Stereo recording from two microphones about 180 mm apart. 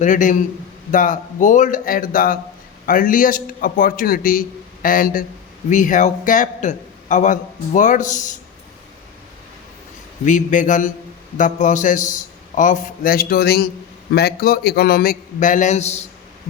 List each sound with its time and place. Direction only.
0.0 s a man's voice: 45° left (ahead or behind)
10.2 s a man's voice: 45° left (ahead or behind)